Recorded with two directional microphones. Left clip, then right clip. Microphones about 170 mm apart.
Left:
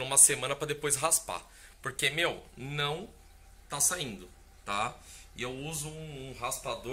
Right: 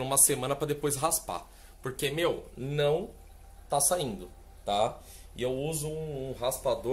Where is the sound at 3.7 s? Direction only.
15° left (ahead or behind).